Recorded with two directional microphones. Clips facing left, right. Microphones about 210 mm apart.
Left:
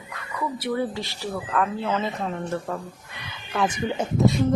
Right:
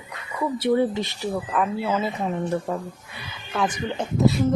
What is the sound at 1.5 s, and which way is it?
Speech, 10° right (ahead or behind).